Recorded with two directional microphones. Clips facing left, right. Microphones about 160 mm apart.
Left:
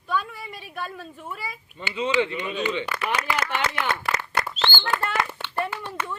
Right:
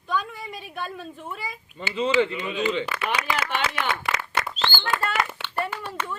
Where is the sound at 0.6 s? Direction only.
5° left (ahead or behind).